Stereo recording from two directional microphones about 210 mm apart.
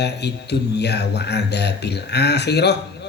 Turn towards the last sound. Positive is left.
turn(degrees=50)  # may be behind; listen again after turning